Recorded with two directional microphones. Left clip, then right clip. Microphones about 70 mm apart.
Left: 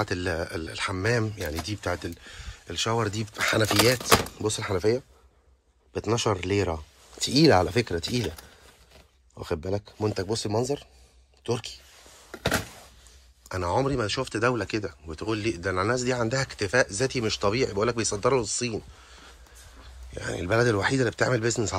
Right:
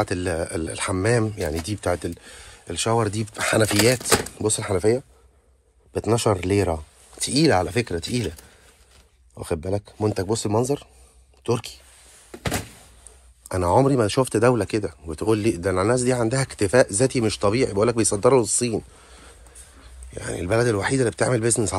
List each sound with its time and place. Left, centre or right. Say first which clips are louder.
0.0 s speech: right 4 dB; left
0.7 s speech: right 4 dB; left
7.2 s speech: even; left
7.8 s speech: right 2 dB; left
13.5 s speech: right 7 dB; left
14.4 s speech: right 5 dB; left
14.7 s speech: right 5 dB; left
15.2 s speech: right 7 dB; centre; by 16.5 s left
16.5 s speech: right 7 dB; left
18.9 s a sound: right 2 dB; left
19.8 s speech: right 1 dB; left